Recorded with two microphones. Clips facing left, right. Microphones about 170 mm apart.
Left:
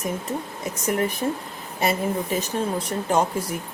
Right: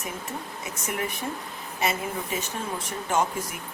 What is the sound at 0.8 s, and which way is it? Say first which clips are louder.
Speech: left 8 dB; 35° left (ahead or behind).